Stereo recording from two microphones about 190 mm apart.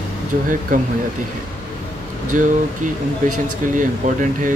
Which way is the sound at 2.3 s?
40° right (ahead or behind).